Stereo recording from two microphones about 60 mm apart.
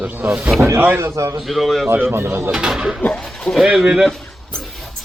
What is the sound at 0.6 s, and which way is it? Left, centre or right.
Speech, right.